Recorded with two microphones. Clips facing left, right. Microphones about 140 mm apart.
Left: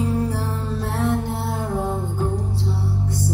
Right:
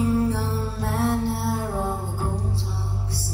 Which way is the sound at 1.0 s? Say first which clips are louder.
Even; 15° left (ahead or behind).